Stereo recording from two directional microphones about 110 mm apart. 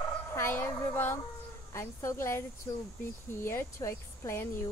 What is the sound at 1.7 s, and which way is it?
Speech, 25° left (ahead or behind).